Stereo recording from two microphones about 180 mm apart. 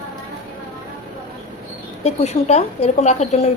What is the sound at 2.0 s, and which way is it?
A woman's voice, 35° left (ahead or behind).